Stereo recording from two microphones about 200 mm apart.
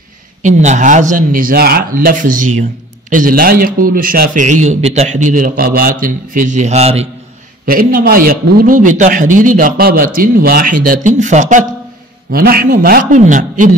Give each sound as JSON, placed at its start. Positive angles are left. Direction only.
{"t": 0.4, "sound": "a man's voice", "side_deg": -35}
{"t": 7.6, "sound": "a man's voice", "side_deg": -45}
{"t": 12.3, "sound": "a man's voice", "side_deg": -50}